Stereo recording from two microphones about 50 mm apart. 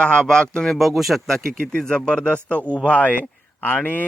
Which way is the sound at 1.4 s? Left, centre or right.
Centre.